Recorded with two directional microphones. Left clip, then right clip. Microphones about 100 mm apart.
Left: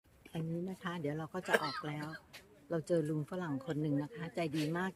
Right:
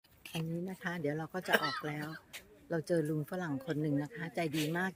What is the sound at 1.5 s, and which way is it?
Speech, 20° left (ahead or behind).